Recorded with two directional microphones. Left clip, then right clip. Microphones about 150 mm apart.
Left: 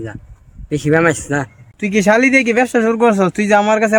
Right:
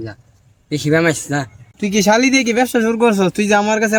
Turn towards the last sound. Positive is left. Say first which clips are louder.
# left 2 dB
turn(degrees=5)  # may be behind; listen again after turning